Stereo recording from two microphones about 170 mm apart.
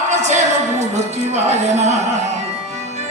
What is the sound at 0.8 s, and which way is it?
Speech, 40° right (ahead or behind).